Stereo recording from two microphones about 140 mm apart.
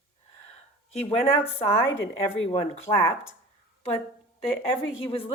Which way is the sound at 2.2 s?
45° left (ahead or behind).